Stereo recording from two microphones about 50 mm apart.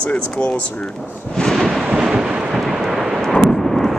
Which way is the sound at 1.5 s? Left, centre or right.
Centre.